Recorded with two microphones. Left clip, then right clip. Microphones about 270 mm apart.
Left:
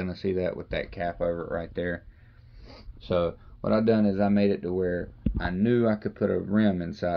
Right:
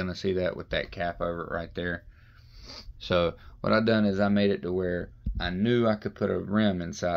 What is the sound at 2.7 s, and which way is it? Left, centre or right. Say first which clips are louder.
Speech: right 1 dB; right.